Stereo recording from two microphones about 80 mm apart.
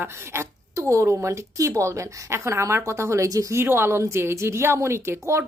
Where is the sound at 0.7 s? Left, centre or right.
Right.